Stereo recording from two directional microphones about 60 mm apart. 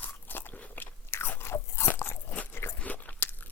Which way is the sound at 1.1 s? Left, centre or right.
Left.